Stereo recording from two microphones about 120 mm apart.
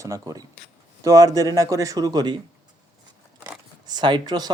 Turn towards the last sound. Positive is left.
turn(degrees=-35)  # may be behind; listen again after turning